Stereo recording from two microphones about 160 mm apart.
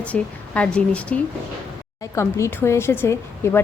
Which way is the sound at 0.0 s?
5° left (ahead or behind).